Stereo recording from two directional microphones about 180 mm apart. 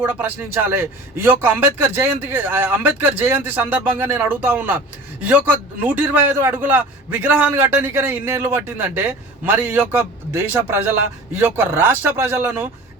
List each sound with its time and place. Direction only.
0.0 s a man's voice: 10° right (ahead or behind)